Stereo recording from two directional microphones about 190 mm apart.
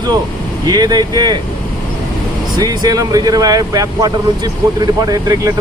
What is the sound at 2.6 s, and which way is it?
Speech, 20° right (ahead or behind).